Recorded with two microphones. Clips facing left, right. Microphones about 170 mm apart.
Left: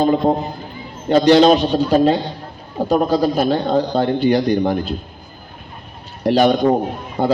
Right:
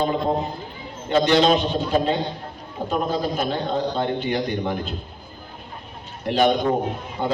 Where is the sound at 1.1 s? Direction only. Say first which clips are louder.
Left 6 dB; 35° left (ahead or behind).